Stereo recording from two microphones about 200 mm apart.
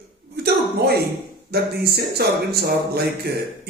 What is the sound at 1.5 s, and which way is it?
Speech, 50° right (ahead or behind).